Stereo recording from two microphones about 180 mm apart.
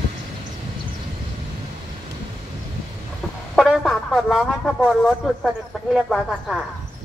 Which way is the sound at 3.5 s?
Centre (ahead or behind).